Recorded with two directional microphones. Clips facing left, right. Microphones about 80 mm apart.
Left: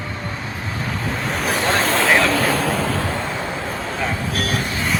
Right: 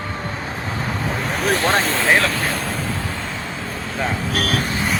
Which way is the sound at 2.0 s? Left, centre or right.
Left.